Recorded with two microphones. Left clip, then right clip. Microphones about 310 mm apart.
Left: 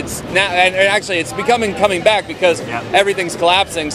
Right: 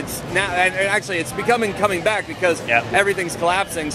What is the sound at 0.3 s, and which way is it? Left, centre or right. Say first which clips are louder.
Speech: left 5 dB; centre.